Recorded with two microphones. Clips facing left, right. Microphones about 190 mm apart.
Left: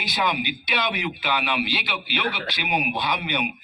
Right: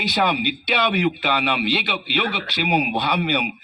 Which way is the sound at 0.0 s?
65° right (ahead or behind).